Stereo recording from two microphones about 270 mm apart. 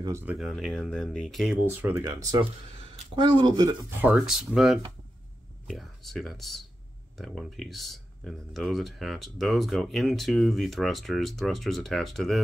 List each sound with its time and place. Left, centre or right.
0.0 s speech: centre
4.1 s speech: centre